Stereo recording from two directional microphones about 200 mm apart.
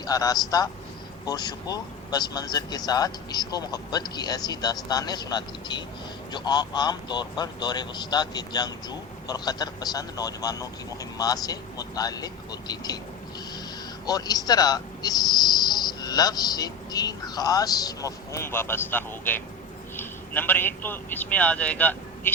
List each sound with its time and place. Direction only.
0.0 s speech: 20° left (ahead or behind)
14.1 s a man's voice: 20° left (ahead or behind)